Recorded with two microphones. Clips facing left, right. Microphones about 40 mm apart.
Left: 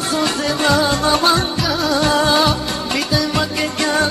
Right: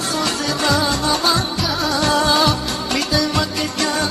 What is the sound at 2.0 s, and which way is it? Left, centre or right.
Music, centre.